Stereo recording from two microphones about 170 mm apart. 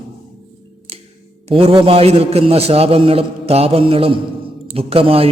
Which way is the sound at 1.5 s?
35° right (ahead or behind).